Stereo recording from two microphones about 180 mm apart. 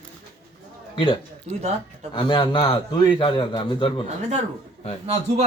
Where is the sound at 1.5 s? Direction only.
45° right (ahead or behind).